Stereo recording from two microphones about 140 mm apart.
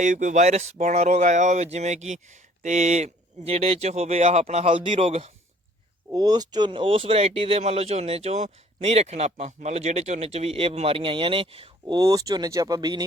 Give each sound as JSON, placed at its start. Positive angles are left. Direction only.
{"t": 0.0, "sound": "speech", "side_deg": -60}
{"t": 6.1, "sound": "speech", "side_deg": -30}
{"t": 11.9, "sound": "speech", "side_deg": -25}